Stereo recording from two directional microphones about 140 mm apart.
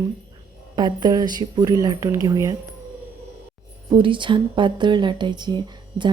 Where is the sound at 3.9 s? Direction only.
35° right (ahead or behind).